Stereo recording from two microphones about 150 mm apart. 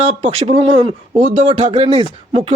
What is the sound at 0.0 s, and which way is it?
A man's voice, 40° right (ahead or behind).